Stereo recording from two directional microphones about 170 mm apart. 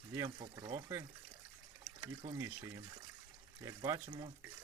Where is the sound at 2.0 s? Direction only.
25° right (ahead or behind).